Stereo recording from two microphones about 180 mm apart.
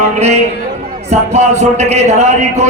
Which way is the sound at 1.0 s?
40° right (ahead or behind).